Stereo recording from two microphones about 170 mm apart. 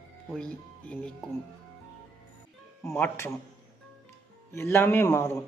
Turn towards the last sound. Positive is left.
turn(degrees=20)  # may be behind; listen again after turning